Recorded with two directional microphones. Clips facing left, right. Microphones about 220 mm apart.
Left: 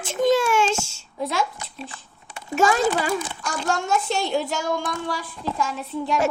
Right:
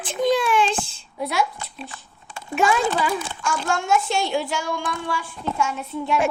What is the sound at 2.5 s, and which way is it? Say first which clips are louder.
A child's voice: left 1 dB; 40° left (ahead or behind).